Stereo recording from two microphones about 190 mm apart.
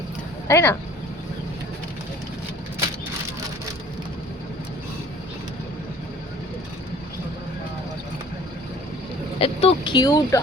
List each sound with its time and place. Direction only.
0.4 s speech: 15° left (ahead or behind)
9.4 s speech: 30° left (ahead or behind)